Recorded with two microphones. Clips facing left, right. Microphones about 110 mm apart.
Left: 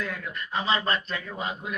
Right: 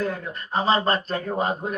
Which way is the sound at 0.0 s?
35° right (ahead or behind).